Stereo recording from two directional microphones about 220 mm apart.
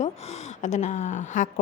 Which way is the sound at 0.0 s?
30° left (ahead or behind).